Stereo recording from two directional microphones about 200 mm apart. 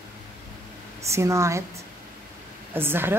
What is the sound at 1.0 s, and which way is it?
Speech, 15° right (ahead or behind).